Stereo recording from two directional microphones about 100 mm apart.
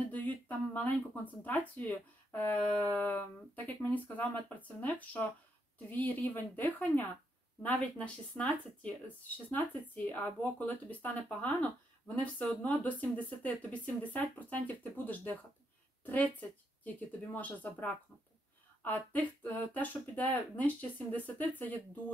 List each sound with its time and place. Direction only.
0.1 s speech: 15° left (ahead or behind)